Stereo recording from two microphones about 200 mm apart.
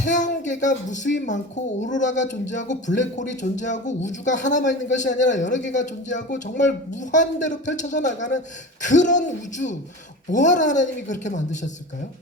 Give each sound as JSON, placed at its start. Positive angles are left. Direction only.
{"t": 0.0, "sound": "a man's voice", "side_deg": 40}